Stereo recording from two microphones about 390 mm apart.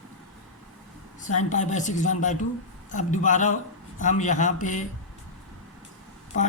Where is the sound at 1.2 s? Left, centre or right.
Centre.